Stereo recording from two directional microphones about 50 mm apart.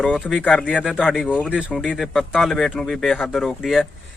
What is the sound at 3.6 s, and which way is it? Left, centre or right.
Speech, centre.